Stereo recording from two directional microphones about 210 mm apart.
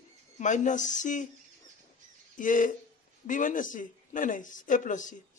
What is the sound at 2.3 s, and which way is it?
Bird, 40° left (ahead or behind).